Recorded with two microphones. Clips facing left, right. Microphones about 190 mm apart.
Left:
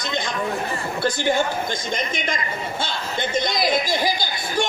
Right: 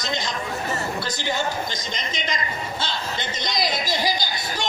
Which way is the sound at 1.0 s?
50° left (ahead or behind).